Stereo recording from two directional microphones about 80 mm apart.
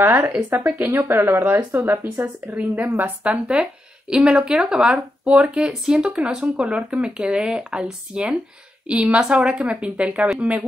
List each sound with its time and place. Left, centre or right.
0.0 s speech: right